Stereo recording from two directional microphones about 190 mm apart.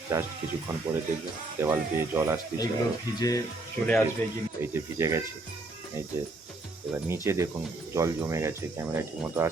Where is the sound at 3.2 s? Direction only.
20° left (ahead or behind).